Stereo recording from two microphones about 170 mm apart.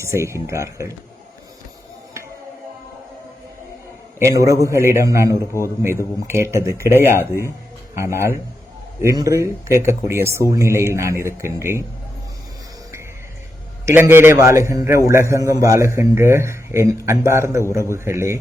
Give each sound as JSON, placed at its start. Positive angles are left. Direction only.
{"t": 0.0, "sound": "a man's voice", "side_deg": -15}
{"t": 4.2, "sound": "a man's voice", "side_deg": -20}
{"t": 13.8, "sound": "a man's voice", "side_deg": -15}